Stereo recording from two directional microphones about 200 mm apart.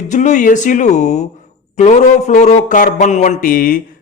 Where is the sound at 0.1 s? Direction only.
40° left (ahead or behind).